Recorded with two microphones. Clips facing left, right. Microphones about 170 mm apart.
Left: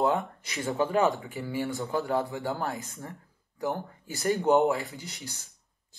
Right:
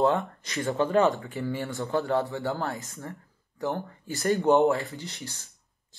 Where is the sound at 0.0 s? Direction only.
20° left (ahead or behind).